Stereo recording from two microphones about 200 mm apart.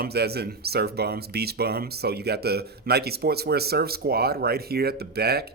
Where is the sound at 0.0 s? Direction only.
55° right (ahead or behind).